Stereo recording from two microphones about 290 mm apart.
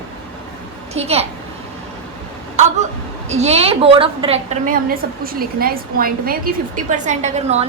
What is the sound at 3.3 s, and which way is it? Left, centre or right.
A woman's voice, right.